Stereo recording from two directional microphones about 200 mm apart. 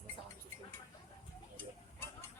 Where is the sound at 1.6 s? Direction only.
10° left (ahead or behind).